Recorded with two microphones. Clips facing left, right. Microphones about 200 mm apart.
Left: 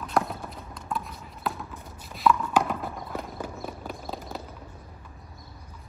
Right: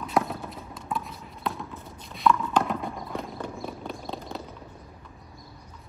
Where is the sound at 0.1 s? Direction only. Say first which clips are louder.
Right 1 dB; centre (ahead or behind).